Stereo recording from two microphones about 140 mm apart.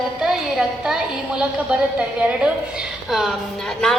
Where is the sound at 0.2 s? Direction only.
Centre (ahead or behind).